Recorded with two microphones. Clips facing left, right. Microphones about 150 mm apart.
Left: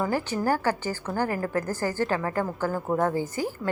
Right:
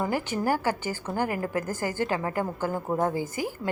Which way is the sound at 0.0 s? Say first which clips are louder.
Left 1 dB; 15° right (ahead or behind).